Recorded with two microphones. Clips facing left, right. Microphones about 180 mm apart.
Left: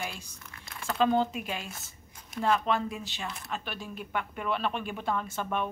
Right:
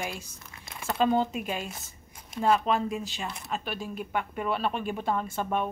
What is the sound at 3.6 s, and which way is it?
Speech, 40° right (ahead or behind).